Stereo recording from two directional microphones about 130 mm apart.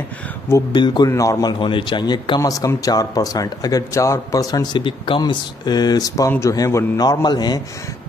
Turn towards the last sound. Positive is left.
turn(degrees=30)  # may be behind; listen again after turning